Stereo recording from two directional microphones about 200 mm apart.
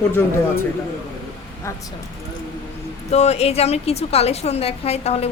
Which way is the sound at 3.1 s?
35° left (ahead or behind).